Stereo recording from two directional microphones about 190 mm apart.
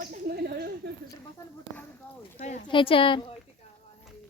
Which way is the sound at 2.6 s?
25° left (ahead or behind).